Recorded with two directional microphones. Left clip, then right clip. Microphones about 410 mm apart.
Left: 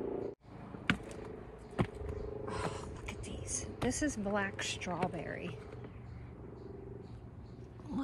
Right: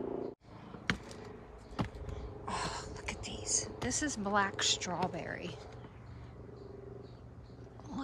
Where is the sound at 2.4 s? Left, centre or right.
Centre.